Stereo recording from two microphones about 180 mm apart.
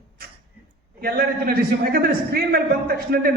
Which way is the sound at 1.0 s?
60° right (ahead or behind).